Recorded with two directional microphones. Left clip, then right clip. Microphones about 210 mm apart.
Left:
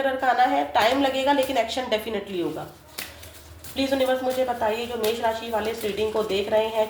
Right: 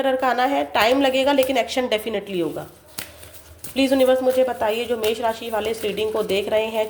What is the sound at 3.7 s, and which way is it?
Speech, 40° right (ahead or behind).